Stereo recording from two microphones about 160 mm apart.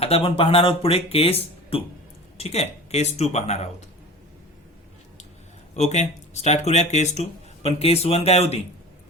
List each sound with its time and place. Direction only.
0.0 s speech: 35° left (ahead or behind)
5.7 s speech: 45° left (ahead or behind)